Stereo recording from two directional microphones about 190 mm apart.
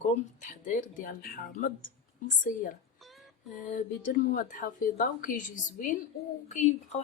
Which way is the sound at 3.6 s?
45° left (ahead or behind).